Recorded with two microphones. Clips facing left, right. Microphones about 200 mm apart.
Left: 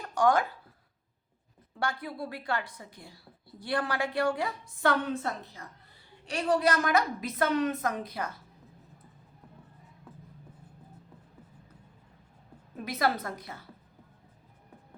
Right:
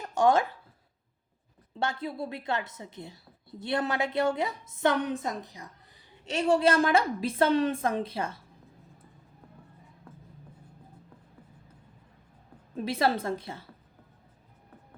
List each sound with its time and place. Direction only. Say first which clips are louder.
0.0 s a sound: right 2 dB; 25° right (ahead or behind)
1.7 s a woman's voice: right 2 dB; 25° right (ahead or behind)
12.7 s a woman's voice: right 3 dB; 30° right (ahead or behind)